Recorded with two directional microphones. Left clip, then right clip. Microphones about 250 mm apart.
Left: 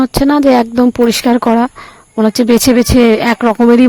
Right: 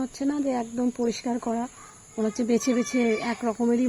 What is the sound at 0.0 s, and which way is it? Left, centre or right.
A woman's voice, left.